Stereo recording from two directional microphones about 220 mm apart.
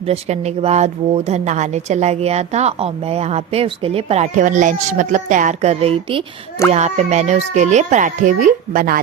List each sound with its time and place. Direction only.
0.0 s speech: 30° right (ahead or behind)